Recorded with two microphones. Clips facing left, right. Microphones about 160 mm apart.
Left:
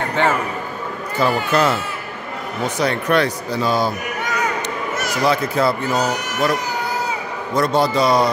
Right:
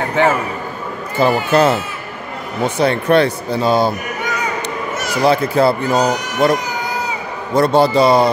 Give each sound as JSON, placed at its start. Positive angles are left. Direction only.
{"t": 0.1, "sound": "a man's voice", "side_deg": -10}
{"t": 1.2, "sound": "speech", "side_deg": -25}
{"t": 5.2, "sound": "speech", "side_deg": -30}